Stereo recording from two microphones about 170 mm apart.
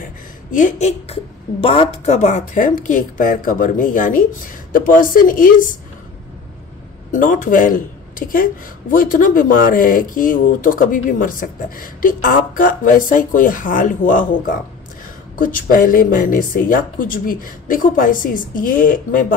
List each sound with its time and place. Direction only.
0.0 s a woman's voice: 50° left (ahead or behind)
7.1 s a woman's voice: 50° left (ahead or behind)
15.3 s speech: 55° left (ahead or behind)